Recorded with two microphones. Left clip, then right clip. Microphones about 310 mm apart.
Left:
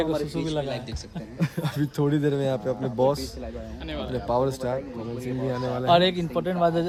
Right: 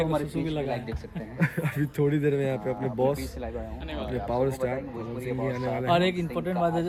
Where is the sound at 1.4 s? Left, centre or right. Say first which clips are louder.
Even; centre.